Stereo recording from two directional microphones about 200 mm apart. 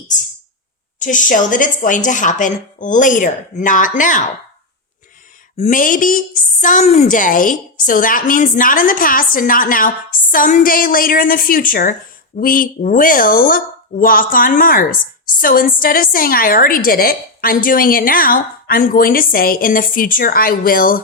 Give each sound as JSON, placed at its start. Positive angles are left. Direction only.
{"t": 0.1, "sound": "a woman's voice", "side_deg": 40}
{"t": 5.5, "sound": "a woman's voice", "side_deg": 40}